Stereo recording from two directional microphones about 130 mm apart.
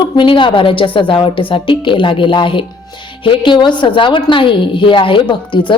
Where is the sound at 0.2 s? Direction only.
40° left (ahead or behind).